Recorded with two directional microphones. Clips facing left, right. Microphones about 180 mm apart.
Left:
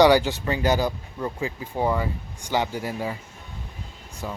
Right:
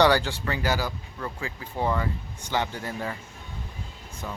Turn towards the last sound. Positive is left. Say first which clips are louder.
# left 3 dB
turn(degrees=10)  # may be behind; listen again after turning